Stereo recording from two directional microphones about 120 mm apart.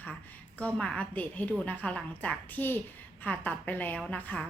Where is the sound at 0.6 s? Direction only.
10° left (ahead or behind).